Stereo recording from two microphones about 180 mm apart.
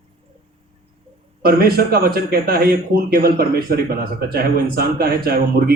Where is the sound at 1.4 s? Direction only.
55° right (ahead or behind).